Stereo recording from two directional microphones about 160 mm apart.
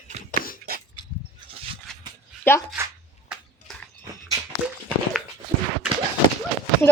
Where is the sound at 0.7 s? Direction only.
70° right (ahead or behind).